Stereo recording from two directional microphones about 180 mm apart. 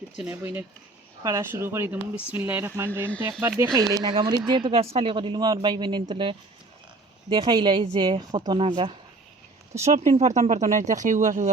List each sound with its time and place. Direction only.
0.2 s speech: 10° right (ahead or behind); by 9.0 s 30° right (ahead or behind)
9.8 s speech: 40° right (ahead or behind)